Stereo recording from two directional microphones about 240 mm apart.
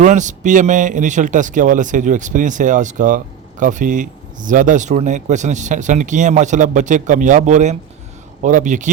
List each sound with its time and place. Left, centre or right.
0.0 s speech: right